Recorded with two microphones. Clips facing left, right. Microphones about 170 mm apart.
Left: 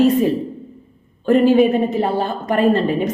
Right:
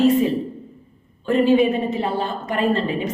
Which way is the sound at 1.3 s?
45° left (ahead or behind).